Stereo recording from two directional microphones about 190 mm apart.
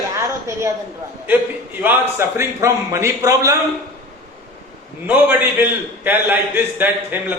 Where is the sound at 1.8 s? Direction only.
10° right (ahead or behind).